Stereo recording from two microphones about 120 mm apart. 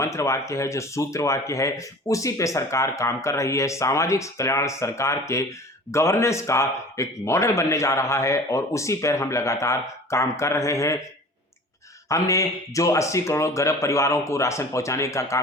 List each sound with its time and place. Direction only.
0.0 s a man's voice: 25° left (ahead or behind)
12.0 s a man's voice: 25° left (ahead or behind)